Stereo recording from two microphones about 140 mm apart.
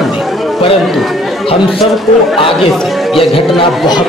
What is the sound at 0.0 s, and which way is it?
Chatter, centre (ahead or behind).